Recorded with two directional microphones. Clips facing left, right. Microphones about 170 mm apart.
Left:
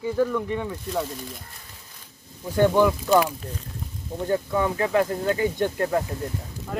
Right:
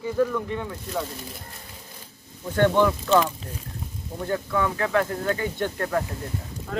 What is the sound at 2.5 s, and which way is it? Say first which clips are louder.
Speech: left 1 dB; 10° left (ahead or behind).